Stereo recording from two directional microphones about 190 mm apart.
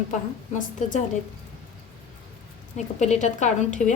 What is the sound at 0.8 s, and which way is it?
Speech, 40° left (ahead or behind).